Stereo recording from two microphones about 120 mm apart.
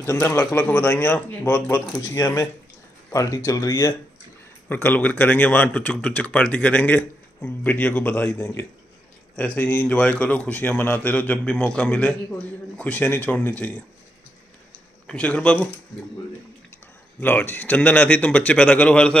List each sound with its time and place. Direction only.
0.0 s speech: 20° left (ahead or behind)
4.6 s speech: 15° left (ahead or behind)
15.0 s speech: 10° left (ahead or behind)
17.2 s speech: 15° left (ahead or behind)